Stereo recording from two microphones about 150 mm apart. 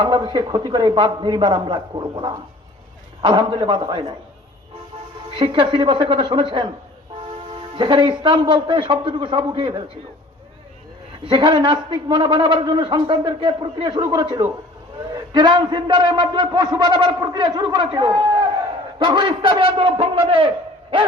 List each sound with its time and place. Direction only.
0.0 s a man's voice: 30° right (ahead or behind)
5.3 s a man's voice: 35° right (ahead or behind)
11.2 s a man's voice: 30° right (ahead or behind)